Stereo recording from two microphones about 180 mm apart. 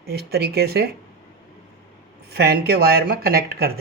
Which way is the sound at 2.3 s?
60° right (ahead or behind).